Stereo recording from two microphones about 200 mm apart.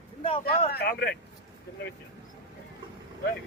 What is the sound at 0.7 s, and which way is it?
Speech, 55° left (ahead or behind).